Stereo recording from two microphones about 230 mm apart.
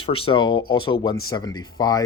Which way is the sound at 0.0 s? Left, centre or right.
Left.